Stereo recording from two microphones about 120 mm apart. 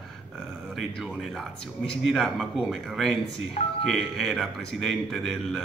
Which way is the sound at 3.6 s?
65° left (ahead or behind).